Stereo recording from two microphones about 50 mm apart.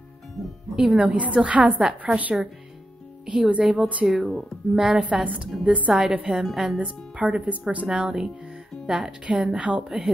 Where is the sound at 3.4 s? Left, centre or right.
Right.